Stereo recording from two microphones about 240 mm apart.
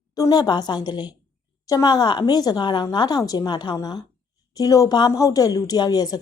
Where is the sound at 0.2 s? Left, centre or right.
Centre.